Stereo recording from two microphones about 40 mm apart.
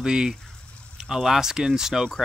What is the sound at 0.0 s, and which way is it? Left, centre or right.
Speech, centre.